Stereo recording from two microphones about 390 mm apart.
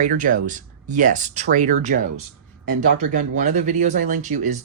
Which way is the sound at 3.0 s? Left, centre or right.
Centre.